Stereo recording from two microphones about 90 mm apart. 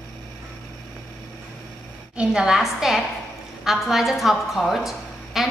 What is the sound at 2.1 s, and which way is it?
A woman's voice, 10° right (ahead or behind).